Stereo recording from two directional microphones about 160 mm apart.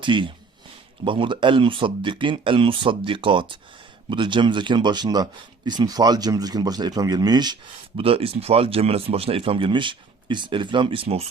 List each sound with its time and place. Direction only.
0.0 s speech: 30° right (ahead or behind)
7.9 s speech: 35° right (ahead or behind)